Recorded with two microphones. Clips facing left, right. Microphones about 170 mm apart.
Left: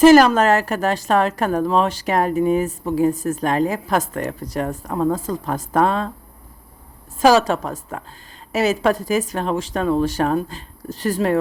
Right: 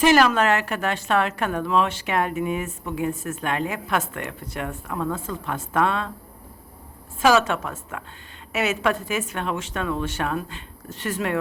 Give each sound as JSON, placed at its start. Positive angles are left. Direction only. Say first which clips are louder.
{"t": 0.0, "sound": "a woman's voice", "louder": "left 7 dB", "side_deg": 40}
{"t": 7.2, "sound": "a woman's voice", "louder": "left 4 dB", "side_deg": 35}